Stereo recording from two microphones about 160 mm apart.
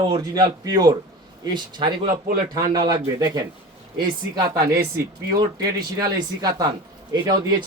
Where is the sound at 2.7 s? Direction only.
25° right (ahead or behind).